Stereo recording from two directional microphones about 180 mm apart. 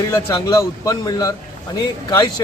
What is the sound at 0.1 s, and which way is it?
Speech, 15° left (ahead or behind).